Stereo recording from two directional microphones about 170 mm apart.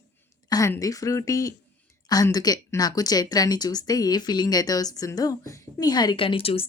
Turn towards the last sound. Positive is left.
turn(degrees=35)  # may be behind; listen again after turning